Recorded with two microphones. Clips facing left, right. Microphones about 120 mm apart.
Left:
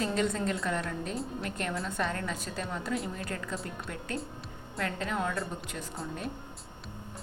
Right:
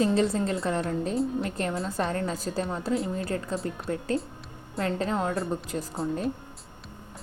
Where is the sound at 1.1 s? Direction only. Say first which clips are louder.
Right 9 dB; centre (ahead or behind).